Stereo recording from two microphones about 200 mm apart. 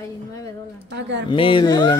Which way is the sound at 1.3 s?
25° left (ahead or behind).